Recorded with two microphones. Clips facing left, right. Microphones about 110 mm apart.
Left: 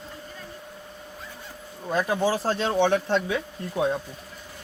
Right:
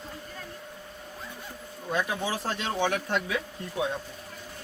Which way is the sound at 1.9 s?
35° left (ahead or behind).